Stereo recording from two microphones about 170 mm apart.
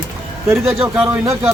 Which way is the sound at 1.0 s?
20° right (ahead or behind).